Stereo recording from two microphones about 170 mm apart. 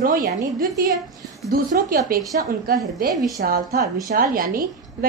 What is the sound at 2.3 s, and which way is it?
A woman's voice, 60° right (ahead or behind).